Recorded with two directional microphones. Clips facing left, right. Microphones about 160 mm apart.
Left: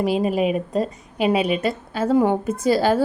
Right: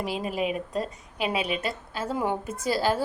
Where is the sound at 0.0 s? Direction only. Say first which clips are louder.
Left 9 dB; 60° left (ahead or behind).